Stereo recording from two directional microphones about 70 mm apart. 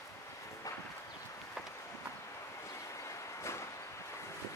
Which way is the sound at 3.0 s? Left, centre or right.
Left.